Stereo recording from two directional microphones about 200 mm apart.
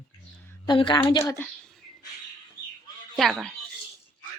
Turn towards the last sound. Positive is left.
turn(degrees=0)  # may be behind; listen again after turning